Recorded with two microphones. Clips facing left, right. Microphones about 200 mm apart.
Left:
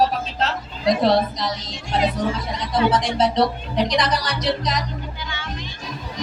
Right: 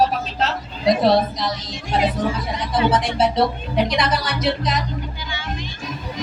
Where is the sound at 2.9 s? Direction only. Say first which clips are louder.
Right 1 dB; 5° right (ahead or behind).